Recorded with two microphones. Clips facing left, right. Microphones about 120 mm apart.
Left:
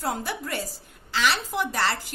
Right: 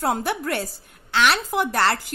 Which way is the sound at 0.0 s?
65° right (ahead or behind).